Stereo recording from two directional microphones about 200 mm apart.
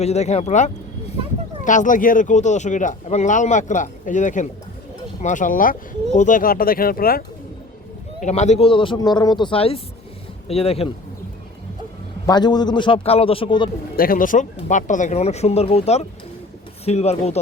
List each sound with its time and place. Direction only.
0.0 s speech: 35° left (ahead or behind); by 7.3 s 50° left (ahead or behind)
8.2 s speech: 35° left (ahead or behind)
12.2 s speech: 20° left (ahead or behind)
13.9 s speech: 45° left (ahead or behind)